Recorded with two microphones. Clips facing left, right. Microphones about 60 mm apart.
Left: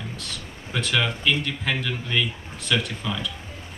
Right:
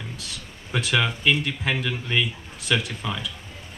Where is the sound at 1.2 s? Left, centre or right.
Right.